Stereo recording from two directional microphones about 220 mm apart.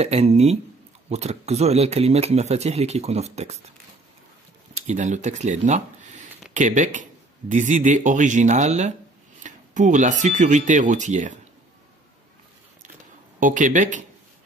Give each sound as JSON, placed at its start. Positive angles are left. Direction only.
{"t": 0.0, "sound": "speech", "side_deg": -30}
{"t": 4.8, "sound": "speech", "side_deg": -35}
{"t": 13.4, "sound": "speech", "side_deg": -35}